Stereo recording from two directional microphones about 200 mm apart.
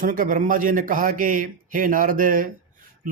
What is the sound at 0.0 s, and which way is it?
Speech, 45° right (ahead or behind).